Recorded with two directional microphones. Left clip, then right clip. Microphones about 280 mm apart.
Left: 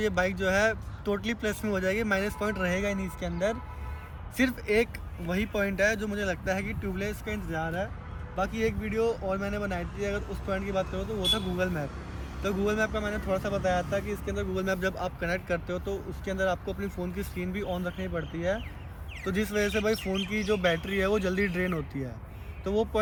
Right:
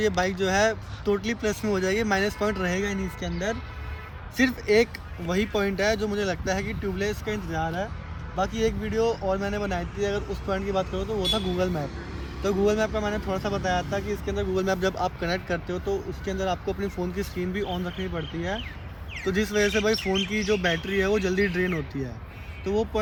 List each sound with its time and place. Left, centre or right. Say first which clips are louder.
0.2 s speech: left 1 dB; centre
2.7 s speech: right 2 dB; centre
4.4 s speech: right 5 dB; centre
22.6 s speech: right 2 dB; centre